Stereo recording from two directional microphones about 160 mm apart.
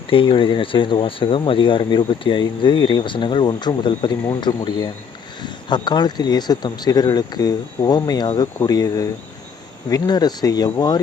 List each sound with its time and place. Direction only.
0.1 s speech: 30° left (ahead or behind)